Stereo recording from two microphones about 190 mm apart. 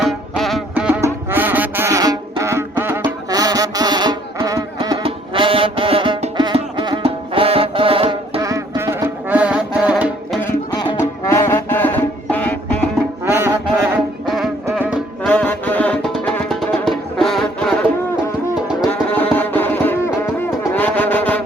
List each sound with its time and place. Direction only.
0.0 s music: centre (ahead or behind); by 8.4 s 30° right (ahead or behind)
8.4 s music: 15° right (ahead or behind)
10.4 s music: 15° left (ahead or behind)
13.2 s music: 15° right (ahead or behind)
14.3 s music: centre (ahead or behind)
15.2 s music: 5° left (ahead or behind)
18.9 s music: 10° left (ahead or behind)